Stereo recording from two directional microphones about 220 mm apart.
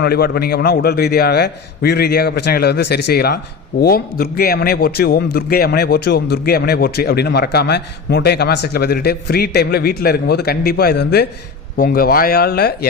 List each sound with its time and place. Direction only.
0.0 s a man's voice: 45° left (ahead or behind)